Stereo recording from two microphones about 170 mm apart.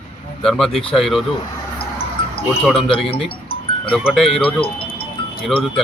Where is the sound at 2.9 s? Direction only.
35° left (ahead or behind).